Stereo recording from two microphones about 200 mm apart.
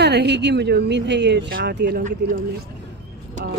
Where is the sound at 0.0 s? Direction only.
55° right (ahead or behind).